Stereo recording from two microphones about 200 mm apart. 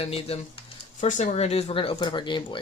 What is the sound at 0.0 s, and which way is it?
Speech, 30° left (ahead or behind).